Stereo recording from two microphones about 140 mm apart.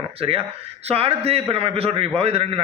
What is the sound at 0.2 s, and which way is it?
A man's voice, 45° right (ahead or behind).